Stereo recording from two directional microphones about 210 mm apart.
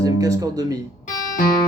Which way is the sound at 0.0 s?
15° right (ahead or behind).